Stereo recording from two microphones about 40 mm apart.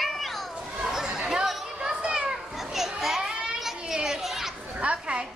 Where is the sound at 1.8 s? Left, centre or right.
Right.